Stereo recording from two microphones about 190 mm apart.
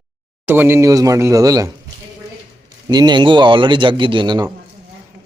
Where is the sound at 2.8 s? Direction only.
25° right (ahead or behind).